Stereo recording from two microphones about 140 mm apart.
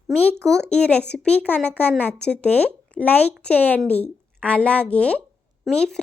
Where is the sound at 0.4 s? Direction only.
5° left (ahead or behind).